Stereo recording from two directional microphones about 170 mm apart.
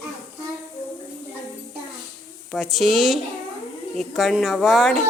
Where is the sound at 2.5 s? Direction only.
Centre (ahead or behind).